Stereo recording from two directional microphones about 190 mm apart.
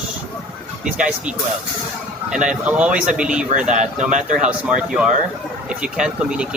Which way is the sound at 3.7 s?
40° right (ahead or behind).